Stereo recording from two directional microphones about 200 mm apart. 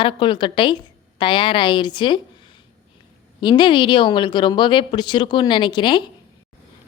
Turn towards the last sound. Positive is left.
turn(degrees=25)  # may be behind; listen again after turning